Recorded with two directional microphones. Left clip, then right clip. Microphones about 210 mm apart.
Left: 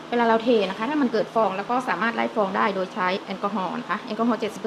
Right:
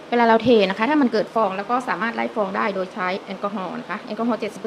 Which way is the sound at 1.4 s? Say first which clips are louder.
Even; 10° right (ahead or behind).